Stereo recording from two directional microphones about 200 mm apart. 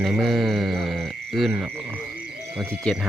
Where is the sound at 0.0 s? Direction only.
Centre (ahead or behind).